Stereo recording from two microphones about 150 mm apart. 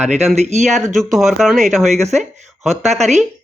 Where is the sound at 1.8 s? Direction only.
50° right (ahead or behind).